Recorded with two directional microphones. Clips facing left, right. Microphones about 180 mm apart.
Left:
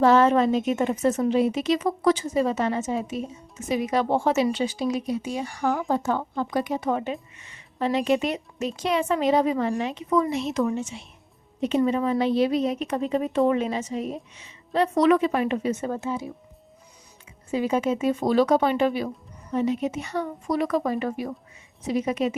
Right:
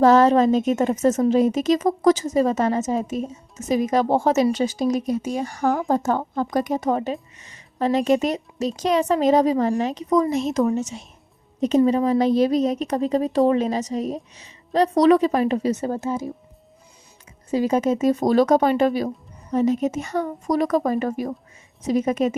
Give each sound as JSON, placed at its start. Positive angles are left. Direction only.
{"t": 0.0, "sound": "a woman's voice", "side_deg": -40}
{"t": 17.5, "sound": "a woman's voice", "side_deg": -40}